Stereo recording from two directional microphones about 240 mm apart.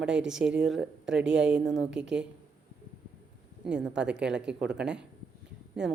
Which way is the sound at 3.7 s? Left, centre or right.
Centre.